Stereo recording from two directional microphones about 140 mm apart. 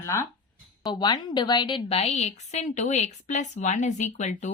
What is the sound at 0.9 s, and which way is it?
A woman's voice, 30° left (ahead or behind).